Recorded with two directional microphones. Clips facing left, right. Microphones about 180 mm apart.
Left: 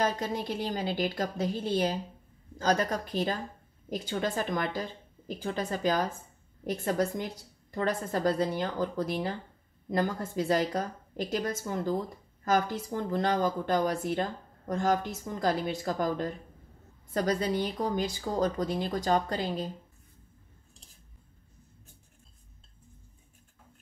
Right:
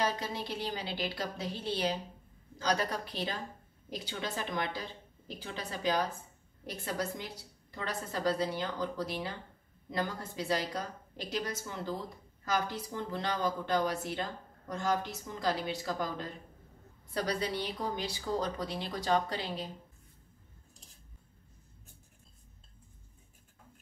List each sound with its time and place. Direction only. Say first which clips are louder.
0.0 s speech: left 4 dB; 45° left (ahead or behind)